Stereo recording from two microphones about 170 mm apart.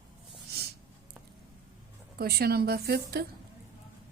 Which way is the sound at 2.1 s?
70° right (ahead or behind).